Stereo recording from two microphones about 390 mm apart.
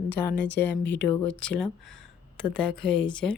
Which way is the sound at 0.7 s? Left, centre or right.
Left.